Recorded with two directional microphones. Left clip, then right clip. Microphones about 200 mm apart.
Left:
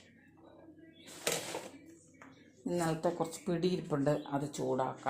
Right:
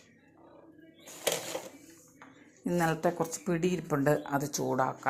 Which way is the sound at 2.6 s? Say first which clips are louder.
Right 5 dB; 20° right (ahead or behind).